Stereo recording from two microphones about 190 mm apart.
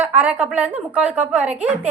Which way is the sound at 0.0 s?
10° right (ahead or behind).